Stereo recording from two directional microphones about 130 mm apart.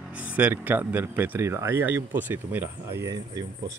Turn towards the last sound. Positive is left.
turn(degrees=-30)  # may be behind; listen again after turning